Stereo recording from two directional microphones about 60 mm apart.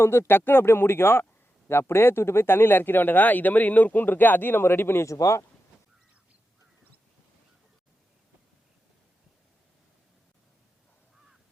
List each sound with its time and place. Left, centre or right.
0.0 s speech: left
5.0 s speech: left